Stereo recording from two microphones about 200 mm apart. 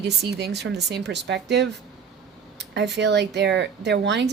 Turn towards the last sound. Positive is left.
turn(degrees=-60)  # may be behind; listen again after turning